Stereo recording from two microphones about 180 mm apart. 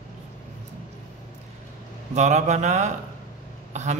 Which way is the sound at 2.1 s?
40° right (ahead or behind).